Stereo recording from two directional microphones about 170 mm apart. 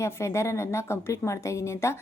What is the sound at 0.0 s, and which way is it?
A woman's voice, 15° left (ahead or behind).